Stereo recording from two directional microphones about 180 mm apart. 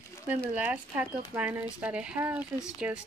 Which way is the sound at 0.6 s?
10° right (ahead or behind).